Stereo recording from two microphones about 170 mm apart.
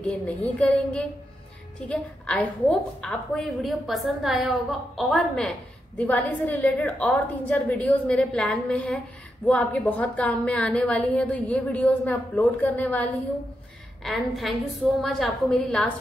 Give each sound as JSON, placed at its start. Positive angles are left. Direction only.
{"t": 0.0, "sound": "a woman's voice", "side_deg": 5}
{"t": 14.0, "sound": "a woman's voice", "side_deg": 0}